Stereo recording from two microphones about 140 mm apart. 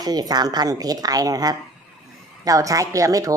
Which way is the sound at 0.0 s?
25° right (ahead or behind).